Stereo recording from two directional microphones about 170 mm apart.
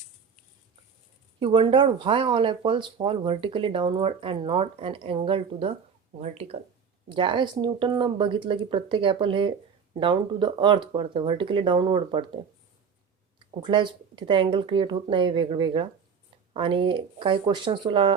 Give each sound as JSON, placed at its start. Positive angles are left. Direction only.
{"t": 1.4, "sound": "speech", "side_deg": -30}
{"t": 13.6, "sound": "speech", "side_deg": -30}